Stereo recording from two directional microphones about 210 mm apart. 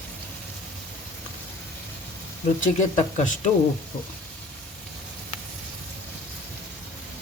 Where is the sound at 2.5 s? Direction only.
35° left (ahead or behind).